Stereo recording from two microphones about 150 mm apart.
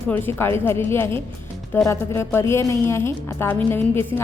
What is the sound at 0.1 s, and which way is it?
A woman's voice, 15° left (ahead or behind).